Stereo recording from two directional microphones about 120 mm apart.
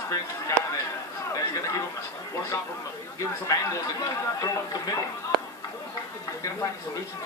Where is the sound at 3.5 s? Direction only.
25° left (ahead or behind).